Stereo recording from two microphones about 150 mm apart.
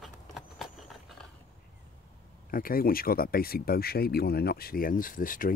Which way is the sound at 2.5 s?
75° left (ahead or behind).